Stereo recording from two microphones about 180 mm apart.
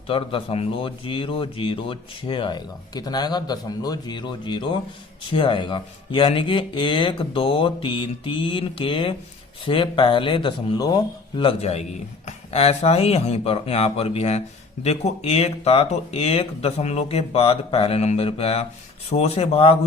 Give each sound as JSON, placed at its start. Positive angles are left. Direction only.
{"t": 0.1, "sound": "speech", "side_deg": 30}